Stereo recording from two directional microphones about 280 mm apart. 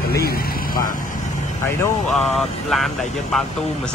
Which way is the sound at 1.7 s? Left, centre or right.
Centre.